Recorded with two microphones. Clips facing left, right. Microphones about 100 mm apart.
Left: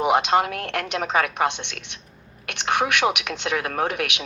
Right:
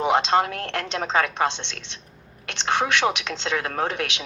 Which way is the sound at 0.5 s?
15° left (ahead or behind).